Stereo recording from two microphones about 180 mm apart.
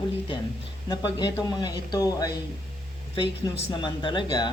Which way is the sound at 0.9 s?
20° left (ahead or behind).